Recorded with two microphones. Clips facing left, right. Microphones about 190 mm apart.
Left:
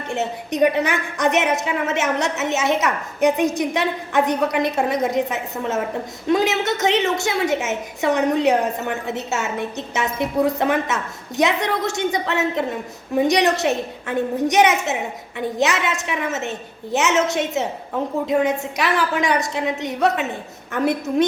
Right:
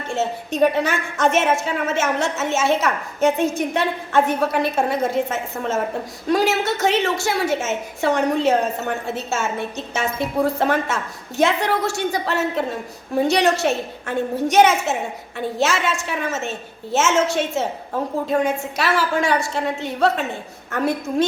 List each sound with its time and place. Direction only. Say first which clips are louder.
0.1 s a woman's voice: right 1 dB; 20° left (ahead or behind)